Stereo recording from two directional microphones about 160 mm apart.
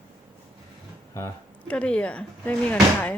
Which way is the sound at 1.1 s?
15° left (ahead or behind).